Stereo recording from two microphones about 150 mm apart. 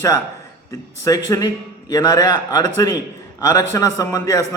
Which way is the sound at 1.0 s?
25° left (ahead or behind).